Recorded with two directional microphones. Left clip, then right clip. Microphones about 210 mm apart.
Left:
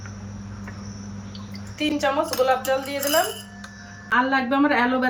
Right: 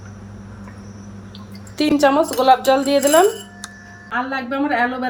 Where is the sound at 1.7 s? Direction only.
30° right (ahead or behind).